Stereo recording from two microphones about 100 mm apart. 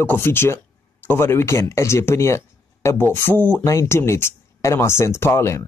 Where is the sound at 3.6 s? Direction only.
30° left (ahead or behind).